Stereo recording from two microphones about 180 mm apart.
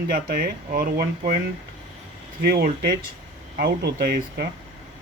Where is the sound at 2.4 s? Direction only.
60° right (ahead or behind).